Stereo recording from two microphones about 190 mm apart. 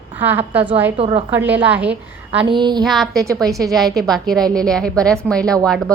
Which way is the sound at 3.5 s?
15° right (ahead or behind).